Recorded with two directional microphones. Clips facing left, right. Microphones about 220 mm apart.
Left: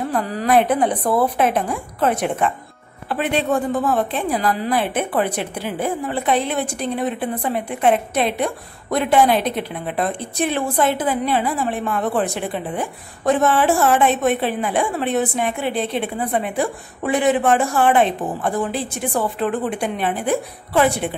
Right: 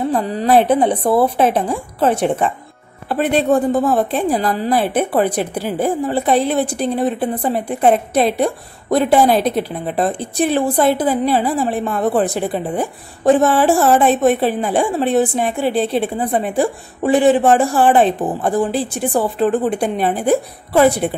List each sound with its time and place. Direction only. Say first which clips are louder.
0.1 s a woman's voice: right 2 dB; 25° right (ahead or behind)